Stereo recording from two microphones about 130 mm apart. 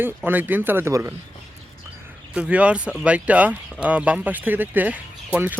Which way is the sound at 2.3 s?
10° right (ahead or behind).